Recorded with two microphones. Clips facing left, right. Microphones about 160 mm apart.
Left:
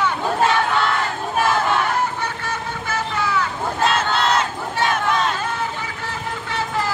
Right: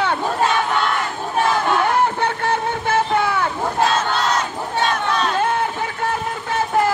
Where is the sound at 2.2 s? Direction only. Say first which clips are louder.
Right 7 dB; 55° right (ahead or behind).